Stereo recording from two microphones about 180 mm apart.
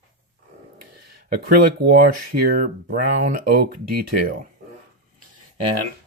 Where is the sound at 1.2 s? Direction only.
60° right (ahead or behind).